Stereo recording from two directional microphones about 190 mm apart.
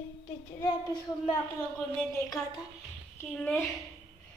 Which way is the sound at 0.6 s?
25° left (ahead or behind).